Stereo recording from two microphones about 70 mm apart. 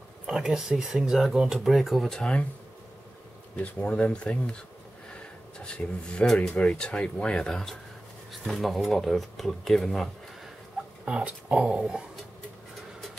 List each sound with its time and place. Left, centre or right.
0.3 s speech: centre
3.5 s speech: left
5.6 s speech: centre
6.5 s speech: centre
11.1 s speech: centre